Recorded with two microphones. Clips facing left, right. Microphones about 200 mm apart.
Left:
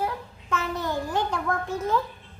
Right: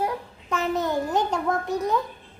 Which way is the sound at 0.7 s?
20° right (ahead or behind).